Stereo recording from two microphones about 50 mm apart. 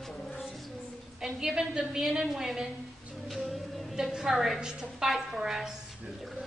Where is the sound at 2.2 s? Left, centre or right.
Centre.